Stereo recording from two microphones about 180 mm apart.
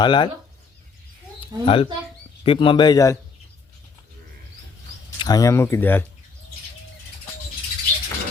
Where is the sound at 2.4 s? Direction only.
30° left (ahead or behind).